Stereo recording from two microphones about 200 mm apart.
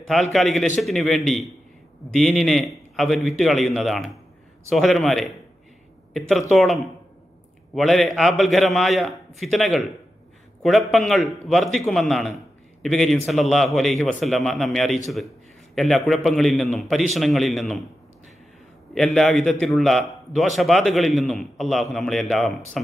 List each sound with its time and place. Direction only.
0.1 s a man's voice: centre (ahead or behind)
10.9 s a man's voice: centre (ahead or behind)
19.1 s a man's voice: centre (ahead or behind)